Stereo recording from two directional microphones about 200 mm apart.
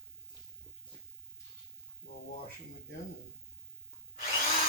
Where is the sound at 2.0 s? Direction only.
40° left (ahead or behind).